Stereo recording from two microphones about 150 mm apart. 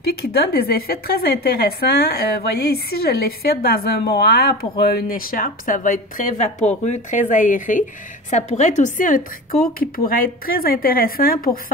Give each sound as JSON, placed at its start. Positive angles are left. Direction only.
{"t": 0.0, "sound": "a woman's voice", "side_deg": 90}
{"t": 8.3, "sound": "speech", "side_deg": 50}
{"t": 9.8, "sound": "a woman's voice", "side_deg": 75}